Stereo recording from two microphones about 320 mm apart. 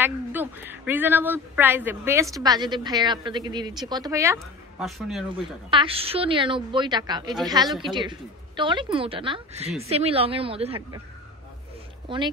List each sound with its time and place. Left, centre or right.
0.0 s a woman's voice: centre
5.7 s a woman's voice: centre